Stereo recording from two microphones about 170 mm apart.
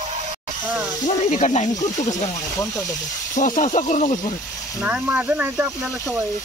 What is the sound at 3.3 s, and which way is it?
Speech, 45° left (ahead or behind).